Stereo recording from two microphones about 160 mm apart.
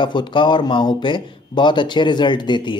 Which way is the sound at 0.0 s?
30° left (ahead or behind).